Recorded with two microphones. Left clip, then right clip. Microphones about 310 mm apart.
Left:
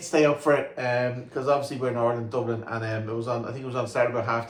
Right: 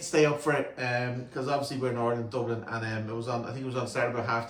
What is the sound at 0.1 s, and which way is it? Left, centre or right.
Speech, centre.